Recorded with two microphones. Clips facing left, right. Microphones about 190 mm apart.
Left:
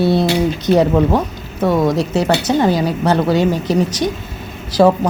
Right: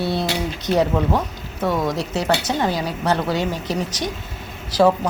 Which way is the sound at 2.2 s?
35° left (ahead or behind).